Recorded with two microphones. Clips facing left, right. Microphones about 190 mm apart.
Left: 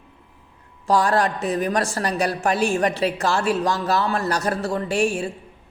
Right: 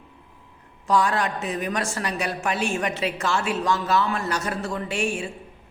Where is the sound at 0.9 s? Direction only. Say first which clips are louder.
Left 3 dB; 35° left (ahead or behind).